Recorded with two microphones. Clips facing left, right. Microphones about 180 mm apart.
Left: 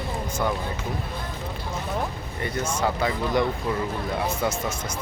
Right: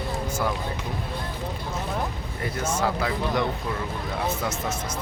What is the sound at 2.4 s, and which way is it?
Speech, 5° right (ahead or behind).